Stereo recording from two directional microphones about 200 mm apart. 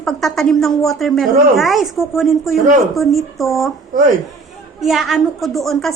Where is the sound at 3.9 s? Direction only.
45° right (ahead or behind).